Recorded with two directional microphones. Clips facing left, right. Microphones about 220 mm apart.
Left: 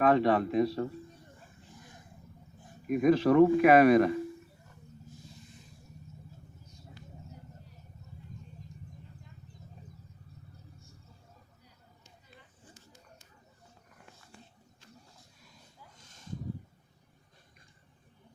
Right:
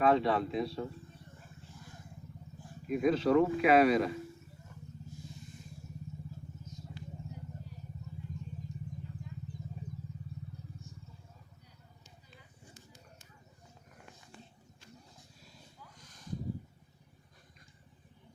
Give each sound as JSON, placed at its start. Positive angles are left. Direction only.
{"t": 0.0, "sound": "a man's voice", "side_deg": 60}
{"t": 2.8, "sound": "a man's voice", "side_deg": 55}